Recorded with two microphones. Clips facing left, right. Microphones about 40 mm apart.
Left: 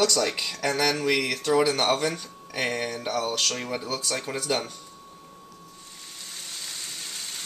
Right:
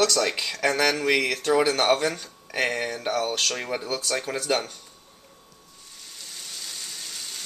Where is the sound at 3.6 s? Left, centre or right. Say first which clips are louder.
Right 1 dB; right.